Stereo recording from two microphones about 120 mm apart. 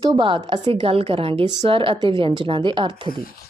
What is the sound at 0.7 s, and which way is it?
Speech, 50° right (ahead or behind).